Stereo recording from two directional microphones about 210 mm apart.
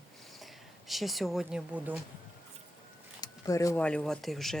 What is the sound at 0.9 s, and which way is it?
Speech, centre (ahead or behind).